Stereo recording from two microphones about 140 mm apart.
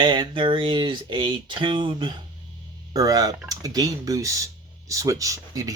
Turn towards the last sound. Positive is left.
turn(degrees=-25)  # may be behind; listen again after turning